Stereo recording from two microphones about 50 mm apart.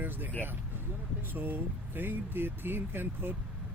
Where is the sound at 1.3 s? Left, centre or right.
Right.